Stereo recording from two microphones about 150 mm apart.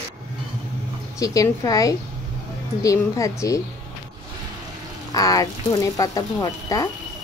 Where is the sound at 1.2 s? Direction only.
25° left (ahead or behind).